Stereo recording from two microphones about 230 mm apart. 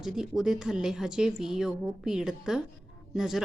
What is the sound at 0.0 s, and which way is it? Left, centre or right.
A woman's voice, centre.